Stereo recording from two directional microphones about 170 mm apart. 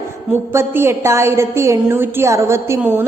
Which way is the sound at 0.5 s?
15° right (ahead or behind).